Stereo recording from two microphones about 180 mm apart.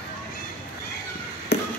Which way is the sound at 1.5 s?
65° left (ahead or behind).